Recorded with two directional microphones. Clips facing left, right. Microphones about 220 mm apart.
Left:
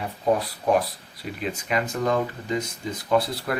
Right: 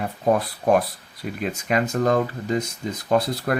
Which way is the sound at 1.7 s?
40° right (ahead or behind).